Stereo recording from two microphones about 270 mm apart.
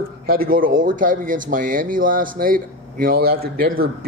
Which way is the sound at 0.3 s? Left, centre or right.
Right.